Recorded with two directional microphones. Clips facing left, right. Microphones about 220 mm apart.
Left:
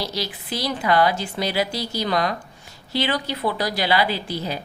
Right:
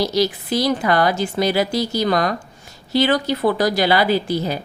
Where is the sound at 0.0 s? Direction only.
45° right (ahead or behind).